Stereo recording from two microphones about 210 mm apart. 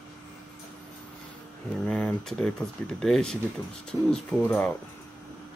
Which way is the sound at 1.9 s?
5° left (ahead or behind).